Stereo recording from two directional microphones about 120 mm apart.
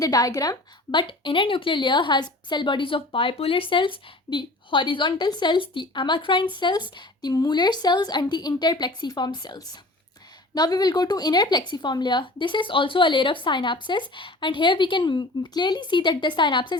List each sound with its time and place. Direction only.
0.0 s a woman's voice: 30° left (ahead or behind)